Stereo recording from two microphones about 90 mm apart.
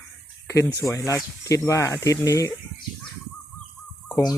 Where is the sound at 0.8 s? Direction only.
35° left (ahead or behind).